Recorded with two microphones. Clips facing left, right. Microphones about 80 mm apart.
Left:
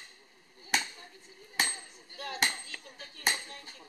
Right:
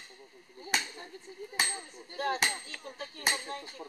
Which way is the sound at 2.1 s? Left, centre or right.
Right.